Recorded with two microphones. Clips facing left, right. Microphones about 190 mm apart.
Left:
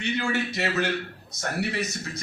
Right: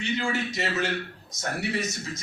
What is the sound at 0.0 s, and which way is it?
A man's voice, 65° left (ahead or behind).